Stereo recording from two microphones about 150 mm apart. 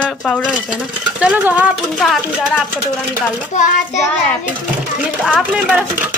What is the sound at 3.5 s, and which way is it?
Child singing, 55° left (ahead or behind).